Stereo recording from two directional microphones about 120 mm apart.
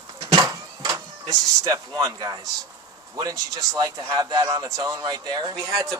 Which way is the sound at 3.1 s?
30° right (ahead or behind).